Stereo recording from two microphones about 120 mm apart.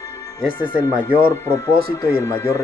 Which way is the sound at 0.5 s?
45° left (ahead or behind).